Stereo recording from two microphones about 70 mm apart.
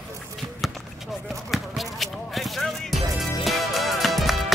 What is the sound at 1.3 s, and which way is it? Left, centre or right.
Music, centre.